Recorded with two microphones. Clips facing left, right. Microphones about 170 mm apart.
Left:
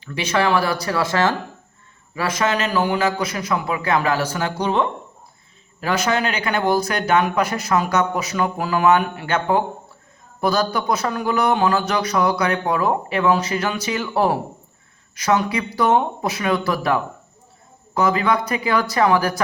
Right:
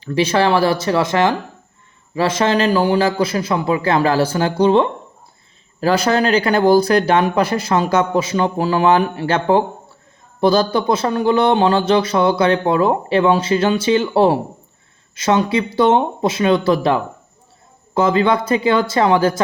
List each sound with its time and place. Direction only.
0.0 s speech: 30° right (ahead or behind)